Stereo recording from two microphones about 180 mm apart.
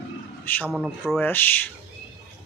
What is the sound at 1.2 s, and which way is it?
Speech, 10° left (ahead or behind).